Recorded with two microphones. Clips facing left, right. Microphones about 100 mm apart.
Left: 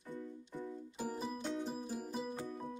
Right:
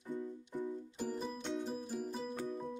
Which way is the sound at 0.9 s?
5° left (ahead or behind).